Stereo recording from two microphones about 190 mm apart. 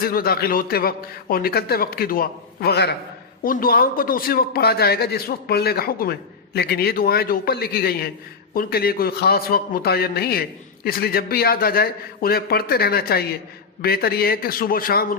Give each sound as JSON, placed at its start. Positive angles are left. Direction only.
{"t": 0.0, "sound": "a man's voice", "side_deg": 50}
{"t": 3.4, "sound": "a man's voice", "side_deg": 50}